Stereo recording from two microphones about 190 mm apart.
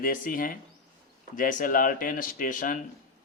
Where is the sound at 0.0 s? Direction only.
45° left (ahead or behind).